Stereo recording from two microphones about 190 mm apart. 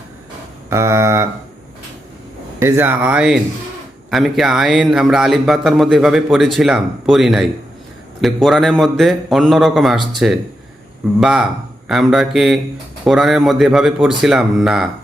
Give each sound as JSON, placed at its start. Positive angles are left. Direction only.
{"t": 0.7, "sound": "speech", "side_deg": -15}
{"t": 2.6, "sound": "speech", "side_deg": -15}
{"t": 11.2, "sound": "speech", "side_deg": 0}